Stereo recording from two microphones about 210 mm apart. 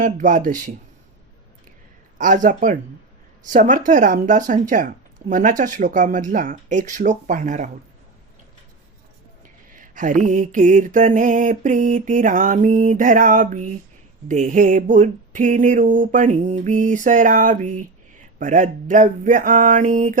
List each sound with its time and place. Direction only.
0.0 s mantra: 40° right (ahead or behind)
2.1 s mantra: 40° right (ahead or behind)
9.7 s mantra: 40° right (ahead or behind)